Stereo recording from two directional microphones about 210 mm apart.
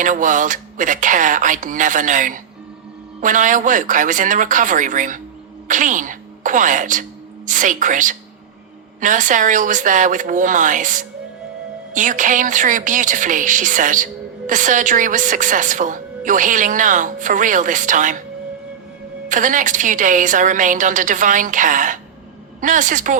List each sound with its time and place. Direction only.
0.0 s a woman's voice: 40° right (ahead or behind)
19.3 s a woman's voice: 40° right (ahead or behind)